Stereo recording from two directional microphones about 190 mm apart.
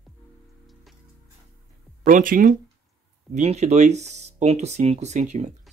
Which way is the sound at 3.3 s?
35° right (ahead or behind).